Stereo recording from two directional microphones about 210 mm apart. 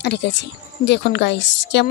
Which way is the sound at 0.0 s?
55° left (ahead or behind).